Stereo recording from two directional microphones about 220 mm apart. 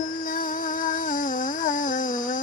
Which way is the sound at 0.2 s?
40° left (ahead or behind).